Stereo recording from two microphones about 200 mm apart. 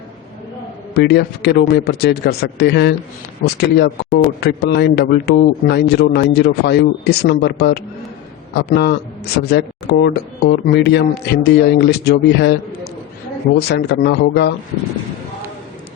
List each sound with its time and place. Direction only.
0.9 s speech: 55° left (ahead or behind)
13.6 s speech: 55° left (ahead or behind)